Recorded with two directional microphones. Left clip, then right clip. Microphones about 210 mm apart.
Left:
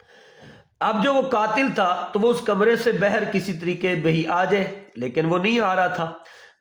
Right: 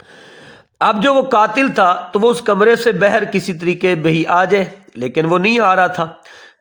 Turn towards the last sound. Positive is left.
turn(degrees=-35)  # may be behind; listen again after turning